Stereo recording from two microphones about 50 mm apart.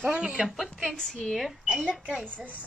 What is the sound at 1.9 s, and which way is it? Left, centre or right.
Speech, right.